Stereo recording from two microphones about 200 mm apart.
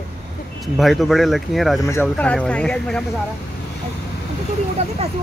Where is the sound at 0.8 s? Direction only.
Centre (ahead or behind).